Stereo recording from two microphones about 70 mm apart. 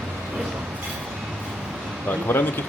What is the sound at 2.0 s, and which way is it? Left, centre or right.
Speech, left.